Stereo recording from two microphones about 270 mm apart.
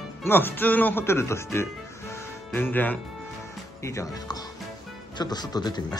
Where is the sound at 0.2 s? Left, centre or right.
Centre.